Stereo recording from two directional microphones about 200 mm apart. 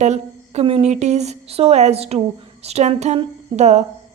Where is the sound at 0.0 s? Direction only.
35° right (ahead or behind).